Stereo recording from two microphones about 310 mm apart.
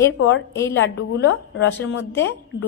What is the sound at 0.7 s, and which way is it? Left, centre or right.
A woman's voice, left.